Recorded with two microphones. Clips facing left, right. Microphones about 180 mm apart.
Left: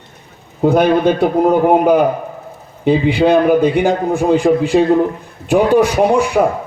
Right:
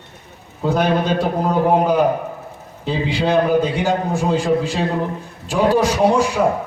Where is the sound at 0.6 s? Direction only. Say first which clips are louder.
Left 7 dB; 60° left (ahead or behind).